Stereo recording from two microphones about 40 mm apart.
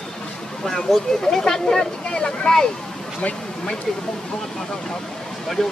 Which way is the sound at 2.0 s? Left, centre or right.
Left.